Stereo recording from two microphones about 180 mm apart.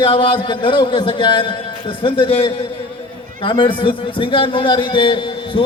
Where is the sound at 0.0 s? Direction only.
30° left (ahead or behind).